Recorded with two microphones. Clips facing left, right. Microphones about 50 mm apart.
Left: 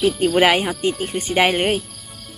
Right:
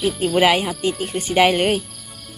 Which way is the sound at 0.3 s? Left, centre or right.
Left.